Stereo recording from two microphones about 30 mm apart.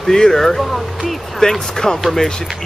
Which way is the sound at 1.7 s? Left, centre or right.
Left.